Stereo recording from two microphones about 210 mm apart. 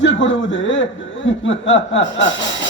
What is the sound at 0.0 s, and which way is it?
A man's voice, 60° left (ahead or behind).